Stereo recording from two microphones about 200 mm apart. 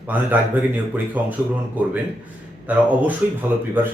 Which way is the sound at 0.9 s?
10° right (ahead or behind).